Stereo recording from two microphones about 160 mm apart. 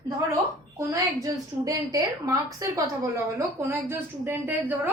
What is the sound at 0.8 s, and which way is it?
A woman's voice, 20° right (ahead or behind).